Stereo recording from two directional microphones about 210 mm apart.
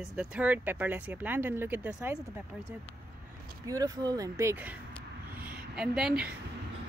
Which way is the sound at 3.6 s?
15° right (ahead or behind).